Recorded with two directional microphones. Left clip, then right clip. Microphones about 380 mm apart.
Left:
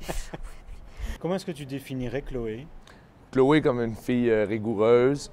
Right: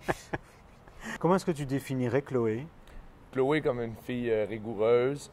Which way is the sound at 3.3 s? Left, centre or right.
Left.